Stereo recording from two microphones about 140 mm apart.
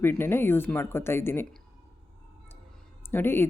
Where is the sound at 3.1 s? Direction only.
15° left (ahead or behind).